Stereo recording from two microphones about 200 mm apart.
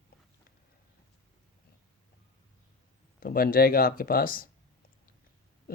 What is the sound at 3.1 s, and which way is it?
Speech, 45° left (ahead or behind).